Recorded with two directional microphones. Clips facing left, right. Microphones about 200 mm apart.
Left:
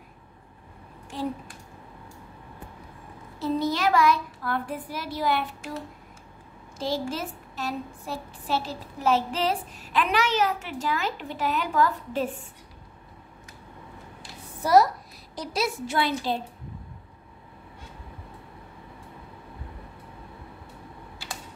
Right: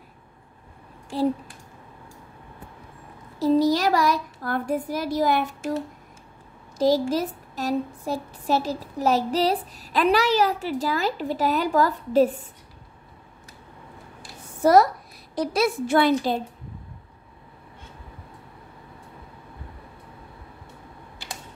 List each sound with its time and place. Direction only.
3.3 s a woman's voice: 35° right (ahead or behind)
6.8 s a woman's voice: 40° right (ahead or behind)
14.6 s a child's voice: 50° right (ahead or behind)